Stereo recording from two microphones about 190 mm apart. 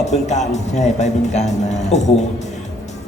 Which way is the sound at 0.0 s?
35° left (ahead or behind).